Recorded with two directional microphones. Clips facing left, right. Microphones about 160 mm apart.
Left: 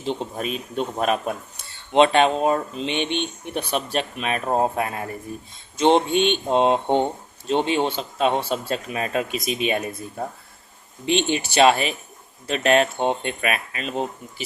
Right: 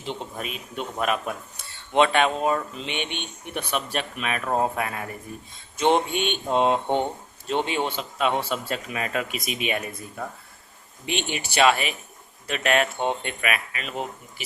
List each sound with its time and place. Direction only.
0.3 s speech: 30° left (ahead or behind)